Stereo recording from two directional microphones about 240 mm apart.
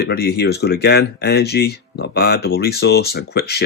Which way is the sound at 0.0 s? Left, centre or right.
Left.